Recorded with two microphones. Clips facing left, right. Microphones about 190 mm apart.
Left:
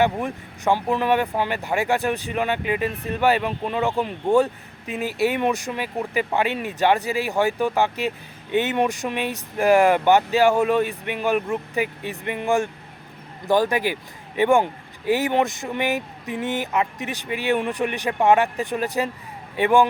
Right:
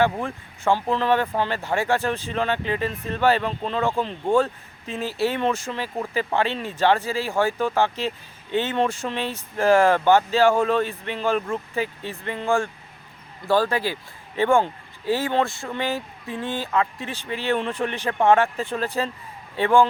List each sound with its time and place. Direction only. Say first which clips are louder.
0.0 s speech: left 1 dB; 15° left (ahead or behind)